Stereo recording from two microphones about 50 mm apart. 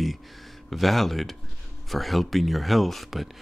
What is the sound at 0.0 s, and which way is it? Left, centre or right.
Speech, centre.